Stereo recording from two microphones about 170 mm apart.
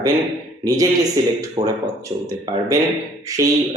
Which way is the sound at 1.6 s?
35° right (ahead or behind).